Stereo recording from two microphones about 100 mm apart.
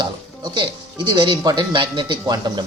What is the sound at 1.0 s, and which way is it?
Speech, 50° right (ahead or behind).